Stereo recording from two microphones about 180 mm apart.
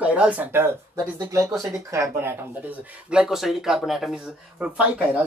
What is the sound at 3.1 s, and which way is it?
Speech, 5° right (ahead or behind).